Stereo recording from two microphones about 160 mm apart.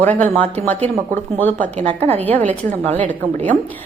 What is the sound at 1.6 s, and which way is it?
Speech, 45° right (ahead or behind).